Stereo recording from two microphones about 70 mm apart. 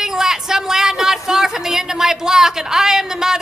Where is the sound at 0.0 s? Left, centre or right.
Centre.